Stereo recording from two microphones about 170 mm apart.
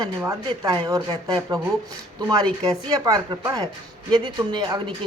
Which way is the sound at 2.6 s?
20° right (ahead or behind).